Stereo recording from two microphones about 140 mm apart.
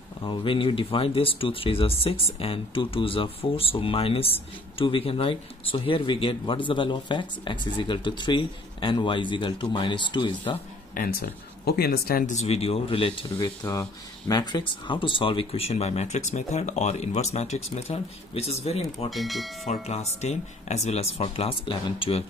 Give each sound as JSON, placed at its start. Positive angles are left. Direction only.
{"t": 0.2, "sound": "speech", "side_deg": 35}
{"t": 11.0, "sound": "speech", "side_deg": 90}
{"t": 12.4, "sound": "speech", "side_deg": 45}
{"t": 13.4, "sound": "speech", "side_deg": 25}
{"t": 19.0, "sound": "speech", "side_deg": 0}
{"t": 19.6, "sound": "speech", "side_deg": 55}